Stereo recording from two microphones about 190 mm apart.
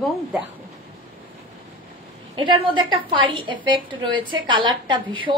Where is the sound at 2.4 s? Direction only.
25° right (ahead or behind).